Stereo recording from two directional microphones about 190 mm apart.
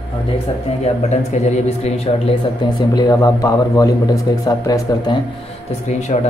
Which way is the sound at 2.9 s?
20° left (ahead or behind).